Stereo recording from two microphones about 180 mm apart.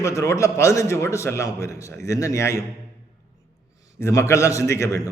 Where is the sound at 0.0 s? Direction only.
15° left (ahead or behind).